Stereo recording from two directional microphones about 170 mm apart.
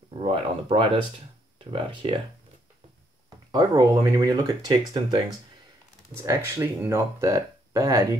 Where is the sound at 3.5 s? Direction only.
20° right (ahead or behind).